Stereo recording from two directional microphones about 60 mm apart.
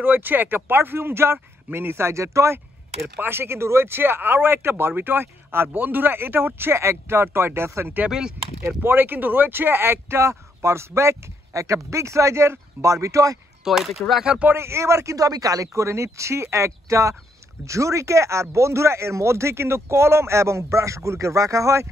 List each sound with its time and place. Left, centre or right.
0.0 s speech: right
8.1 s speech: centre
8.6 s speech: right
13.7 s speech: centre
14.5 s speech: right